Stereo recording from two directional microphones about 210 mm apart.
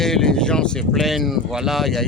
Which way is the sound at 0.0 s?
Centre (ahead or behind).